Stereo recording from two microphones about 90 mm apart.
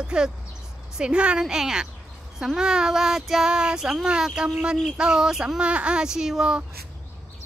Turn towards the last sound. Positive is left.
turn(degrees=-5)  # may be behind; listen again after turning